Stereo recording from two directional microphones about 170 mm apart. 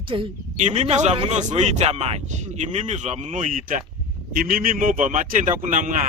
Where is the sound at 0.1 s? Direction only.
30° right (ahead or behind).